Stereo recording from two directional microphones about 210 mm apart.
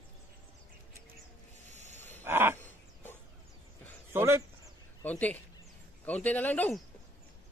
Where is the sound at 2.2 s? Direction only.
10° right (ahead or behind).